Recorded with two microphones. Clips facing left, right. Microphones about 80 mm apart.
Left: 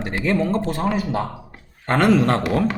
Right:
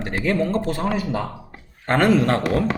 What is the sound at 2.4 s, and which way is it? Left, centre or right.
Speech, centre.